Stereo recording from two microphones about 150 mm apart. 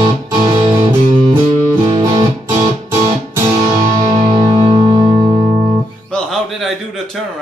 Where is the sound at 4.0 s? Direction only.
45° right (ahead or behind).